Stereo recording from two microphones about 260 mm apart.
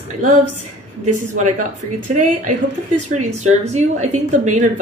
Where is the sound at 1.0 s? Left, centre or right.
Right.